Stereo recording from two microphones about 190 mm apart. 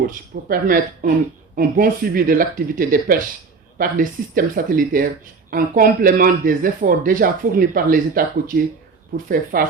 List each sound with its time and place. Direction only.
0.1 s speech: 50° right (ahead or behind)